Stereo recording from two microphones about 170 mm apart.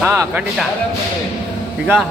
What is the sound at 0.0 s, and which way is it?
Music, 10° right (ahead or behind).